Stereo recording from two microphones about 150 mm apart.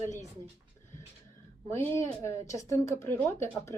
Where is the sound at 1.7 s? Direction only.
15° left (ahead or behind).